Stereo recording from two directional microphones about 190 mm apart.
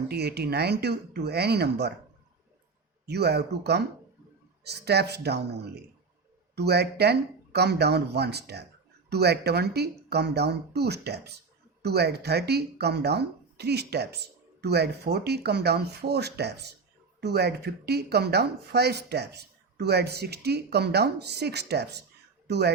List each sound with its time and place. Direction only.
0.1 s speech: 60° right (ahead or behind)
3.1 s speech: 60° right (ahead or behind)